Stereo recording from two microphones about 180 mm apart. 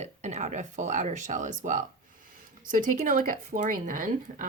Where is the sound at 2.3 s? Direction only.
50° right (ahead or behind).